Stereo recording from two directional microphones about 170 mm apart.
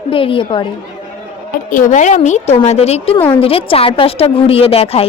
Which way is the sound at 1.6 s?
50° left (ahead or behind).